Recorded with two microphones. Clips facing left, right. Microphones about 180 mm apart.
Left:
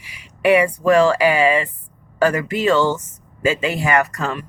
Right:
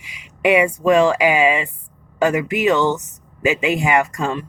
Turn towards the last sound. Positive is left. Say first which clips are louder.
# right 1 dB
turn(degrees=-25)  # may be behind; listen again after turning